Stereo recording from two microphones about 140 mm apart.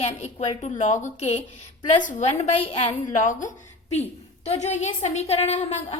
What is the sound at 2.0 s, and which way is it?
Speech, 70° left (ahead or behind).